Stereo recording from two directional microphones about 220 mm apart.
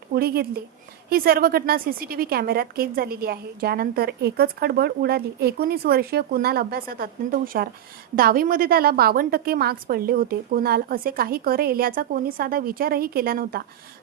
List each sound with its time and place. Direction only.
0.1 s a woman's voice: 45° right (ahead or behind)